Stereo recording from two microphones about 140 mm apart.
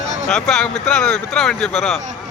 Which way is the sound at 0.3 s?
5° left (ahead or behind).